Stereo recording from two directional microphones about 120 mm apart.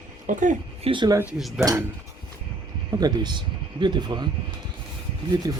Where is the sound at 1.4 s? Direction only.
Centre (ahead or behind).